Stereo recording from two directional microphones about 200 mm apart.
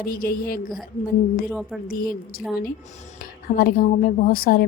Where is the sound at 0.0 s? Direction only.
45° left (ahead or behind).